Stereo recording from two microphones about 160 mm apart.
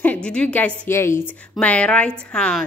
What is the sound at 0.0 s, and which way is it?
A woman's voice, 10° left (ahead or behind).